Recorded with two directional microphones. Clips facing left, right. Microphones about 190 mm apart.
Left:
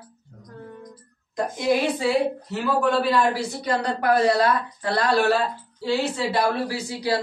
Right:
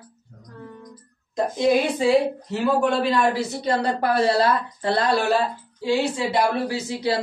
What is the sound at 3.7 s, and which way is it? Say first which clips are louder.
Speech: even; 30° right (ahead or behind).